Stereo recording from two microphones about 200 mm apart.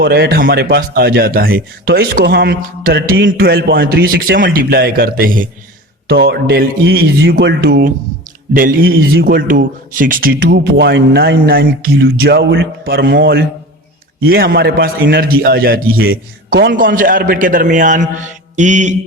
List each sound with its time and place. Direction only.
0.0 s a man's voice: 50° right (ahead or behind)
16.8 s a man's voice: 45° right (ahead or behind)